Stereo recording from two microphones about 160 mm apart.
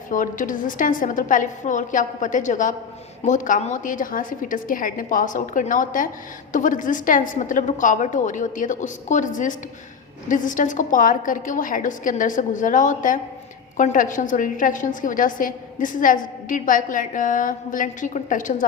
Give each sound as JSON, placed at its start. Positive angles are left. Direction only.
{"t": 0.1, "sound": "a woman's voice", "side_deg": 55}